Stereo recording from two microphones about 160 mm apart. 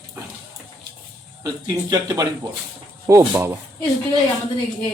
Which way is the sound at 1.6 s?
25° right (ahead or behind).